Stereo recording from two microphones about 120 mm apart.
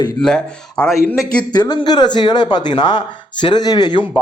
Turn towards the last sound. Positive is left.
turn(degrees=35)  # may be behind; listen again after turning